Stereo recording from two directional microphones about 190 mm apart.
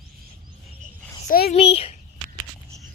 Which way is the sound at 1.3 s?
55° left (ahead or behind).